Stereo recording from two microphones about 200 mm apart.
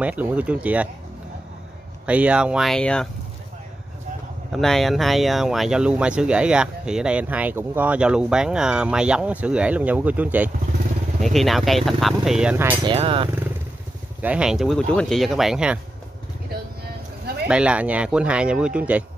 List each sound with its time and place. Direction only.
0.0 s speech: 5° right (ahead or behind)
2.0 s speech: 5° right (ahead or behind)
4.5 s speech: centre (ahead or behind)
12.8 s speech: 30° right (ahead or behind)
14.2 s speech: 5° right (ahead or behind)
17.5 s speech: 5° right (ahead or behind)